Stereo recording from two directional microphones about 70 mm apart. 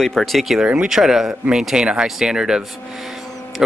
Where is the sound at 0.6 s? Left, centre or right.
Centre.